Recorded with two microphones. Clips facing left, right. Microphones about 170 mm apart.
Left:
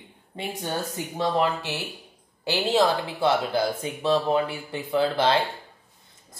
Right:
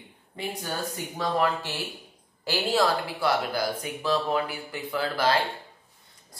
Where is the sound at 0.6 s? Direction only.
25° left (ahead or behind).